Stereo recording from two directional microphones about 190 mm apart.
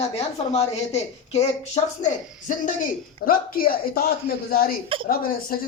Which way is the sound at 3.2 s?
50° left (ahead or behind).